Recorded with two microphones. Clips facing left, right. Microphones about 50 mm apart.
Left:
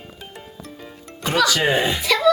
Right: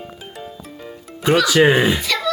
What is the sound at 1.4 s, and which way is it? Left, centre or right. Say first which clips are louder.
Speech: right 5 dB; centre.